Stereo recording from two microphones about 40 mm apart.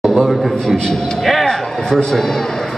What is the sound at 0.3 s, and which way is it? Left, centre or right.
Speech, centre.